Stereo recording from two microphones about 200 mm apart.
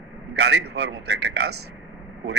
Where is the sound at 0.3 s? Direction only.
55° right (ahead or behind).